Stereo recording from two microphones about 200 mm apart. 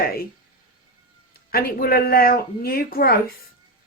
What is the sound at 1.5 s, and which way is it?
Speech, 50° left (ahead or behind).